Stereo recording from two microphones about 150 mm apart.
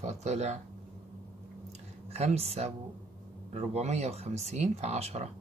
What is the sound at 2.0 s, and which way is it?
Speech, 45° right (ahead or behind).